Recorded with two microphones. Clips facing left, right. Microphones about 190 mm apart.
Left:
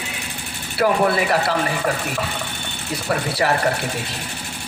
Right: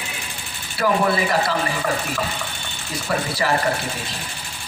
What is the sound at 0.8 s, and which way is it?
Speech, 65° left (ahead or behind).